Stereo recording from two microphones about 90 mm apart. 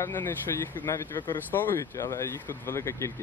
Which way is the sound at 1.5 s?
20° left (ahead or behind).